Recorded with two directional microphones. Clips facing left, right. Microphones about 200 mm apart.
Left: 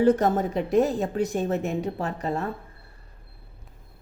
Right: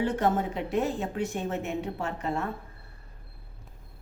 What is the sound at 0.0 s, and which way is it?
A woman's voice, 40° left (ahead or behind).